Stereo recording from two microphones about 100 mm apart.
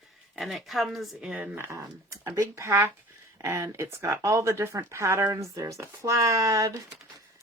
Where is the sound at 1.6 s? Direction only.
25° right (ahead or behind).